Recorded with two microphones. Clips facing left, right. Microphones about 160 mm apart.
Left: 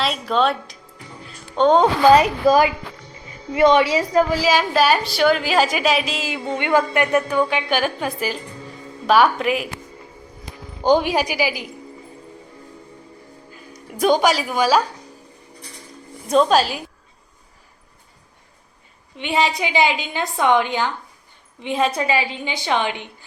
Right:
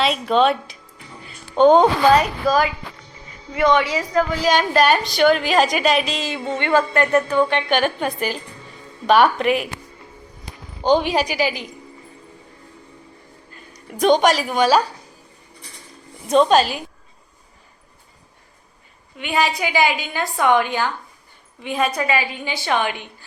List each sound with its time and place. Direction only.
0.0 s a woman's voice: centre (ahead or behind)
3.5 s a woman's voice: 20° left (ahead or behind)
4.4 s a woman's voice: 5° left (ahead or behind)
10.8 s a woman's voice: 10° left (ahead or behind)
13.9 s a woman's voice: 5° left (ahead or behind)
16.2 s a woman's voice: centre (ahead or behind)
19.1 s a woman's voice: 25° left (ahead or behind)